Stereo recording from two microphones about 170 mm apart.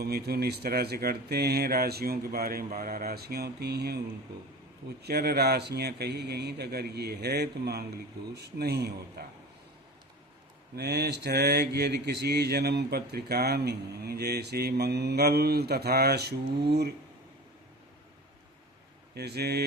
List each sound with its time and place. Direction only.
0.0 s speech: 70° right (ahead or behind)
5.0 s speech: 70° right (ahead or behind)
10.8 s speech: 75° right (ahead or behind)
19.1 s speech: 70° right (ahead or behind)